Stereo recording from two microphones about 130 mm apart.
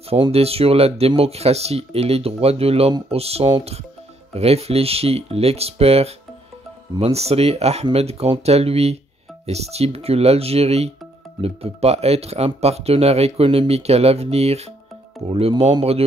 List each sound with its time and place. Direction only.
0.3 s speech: 50° right (ahead or behind)